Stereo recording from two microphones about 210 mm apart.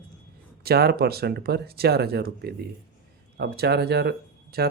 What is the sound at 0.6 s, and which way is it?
Speech, 50° right (ahead or behind).